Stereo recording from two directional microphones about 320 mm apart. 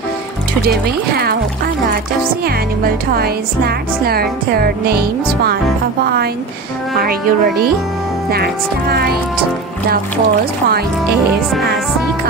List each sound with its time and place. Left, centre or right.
2.4 s a woman's voice: right
7.0 s a woman's voice: right